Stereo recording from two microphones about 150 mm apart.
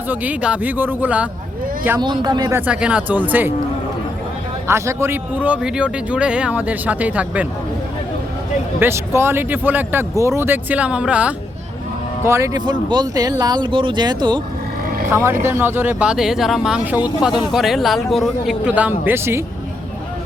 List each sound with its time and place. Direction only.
0.1 s a man's voice: 10° right (ahead or behind)
2.0 s speech: 30° right (ahead or behind)
2.6 s a man's voice: 10° right (ahead or behind)
4.7 s a man's voice: 15° right (ahead or behind)
8.8 s a man's voice: 15° right (ahead or behind)
12.2 s speech: 20° right (ahead or behind)
15.0 s a man's voice: 15° right (ahead or behind)